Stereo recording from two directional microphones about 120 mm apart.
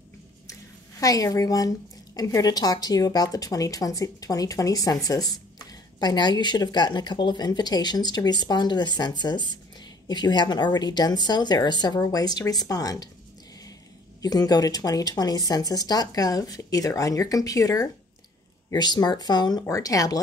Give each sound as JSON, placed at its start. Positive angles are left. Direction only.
{"t": 0.5, "sound": "a sound", "side_deg": 30}
{"t": 2.1, "sound": "a woman's voice", "side_deg": 30}
{"t": 14.2, "sound": "a woman's voice", "side_deg": 30}